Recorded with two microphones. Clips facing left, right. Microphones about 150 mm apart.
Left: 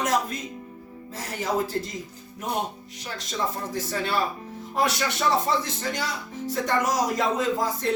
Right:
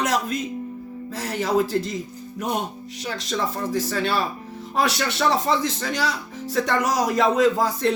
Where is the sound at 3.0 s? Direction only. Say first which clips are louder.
Right 3 dB; 80° right.